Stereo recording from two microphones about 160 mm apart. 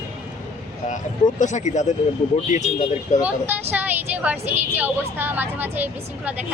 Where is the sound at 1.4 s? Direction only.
50° left (ahead or behind).